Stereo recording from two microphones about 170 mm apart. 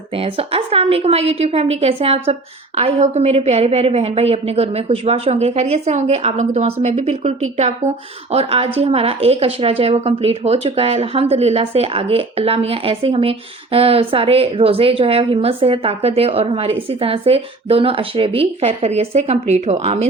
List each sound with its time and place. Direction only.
0.2 s a woman's voice: 35° right (ahead or behind)